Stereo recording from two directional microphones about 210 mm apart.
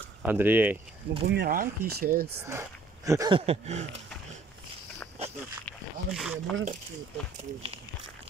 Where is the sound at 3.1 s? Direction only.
15° right (ahead or behind).